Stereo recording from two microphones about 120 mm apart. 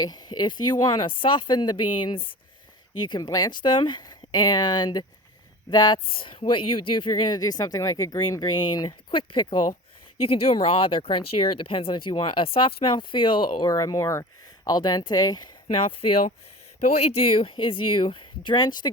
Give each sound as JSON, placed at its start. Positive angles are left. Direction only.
{"t": 0.0, "sound": "speech", "side_deg": 35}
{"t": 13.7, "sound": "speech", "side_deg": 30}
{"t": 14.6, "sound": "speech", "side_deg": 35}
{"t": 15.7, "sound": "speech", "side_deg": 50}